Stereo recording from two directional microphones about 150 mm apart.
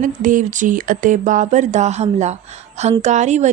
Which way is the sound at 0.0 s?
60° right (ahead or behind).